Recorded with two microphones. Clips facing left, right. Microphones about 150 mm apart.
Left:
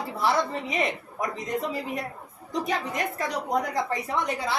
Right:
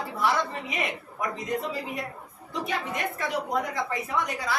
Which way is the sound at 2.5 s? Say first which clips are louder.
Left 2 dB; 40° left (ahead or behind).